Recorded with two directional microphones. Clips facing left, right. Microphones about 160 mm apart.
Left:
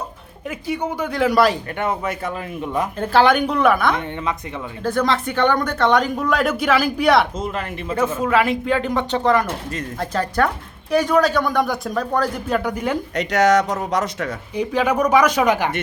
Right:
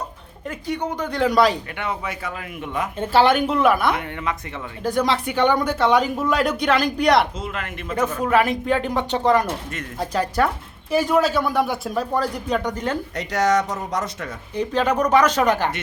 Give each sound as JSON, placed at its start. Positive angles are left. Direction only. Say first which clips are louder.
{"t": 0.4, "sound": "speech", "louder": "left 2 dB", "side_deg": 10}
{"t": 1.7, "sound": "a man's voice", "louder": "left 5 dB", "side_deg": 50}
{"t": 2.6, "sound": "speech", "louder": "left 3 dB", "side_deg": 35}
{"t": 3.0, "sound": "a woman's voice", "louder": "left 1 dB", "side_deg": 0}
{"t": 7.3, "sound": "speech", "louder": "left 4 dB", "side_deg": 40}
{"t": 8.3, "sound": "a woman's voice", "louder": "right 1 dB", "side_deg": -15}
{"t": 13.1, "sound": "speech", "louder": "left 4 dB", "side_deg": 85}
{"t": 14.5, "sound": "speech", "louder": "left 1 dB", "side_deg": 10}